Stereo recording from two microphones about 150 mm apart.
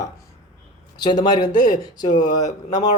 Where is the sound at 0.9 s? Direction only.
30° left (ahead or behind).